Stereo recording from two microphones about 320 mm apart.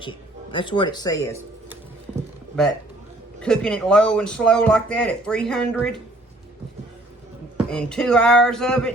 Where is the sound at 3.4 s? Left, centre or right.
Centre.